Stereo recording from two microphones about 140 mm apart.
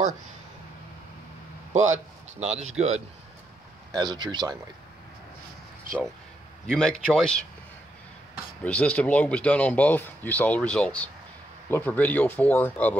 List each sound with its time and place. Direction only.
1.7 s speech: 55° right (ahead or behind)
3.9 s speech: 30° right (ahead or behind)
6.7 s a man's voice: 5° left (ahead or behind)
8.6 s speech: 10° left (ahead or behind)